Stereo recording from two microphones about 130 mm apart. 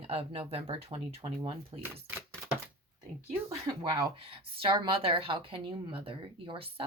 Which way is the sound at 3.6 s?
35° right (ahead or behind).